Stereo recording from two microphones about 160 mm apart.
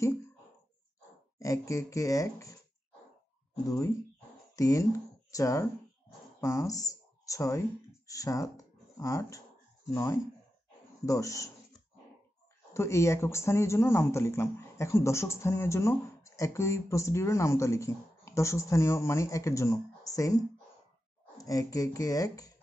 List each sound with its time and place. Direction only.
1.4 s speech: 20° left (ahead or behind)
3.6 s speech: 20° left (ahead or behind)
11.1 s speech: 20° left (ahead or behind)
12.7 s speech: 20° left (ahead or behind)
21.5 s speech: 20° left (ahead or behind)